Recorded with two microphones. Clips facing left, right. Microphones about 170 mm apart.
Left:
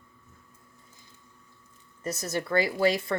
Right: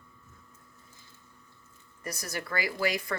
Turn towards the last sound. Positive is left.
turn(degrees=25)  # may be behind; listen again after turning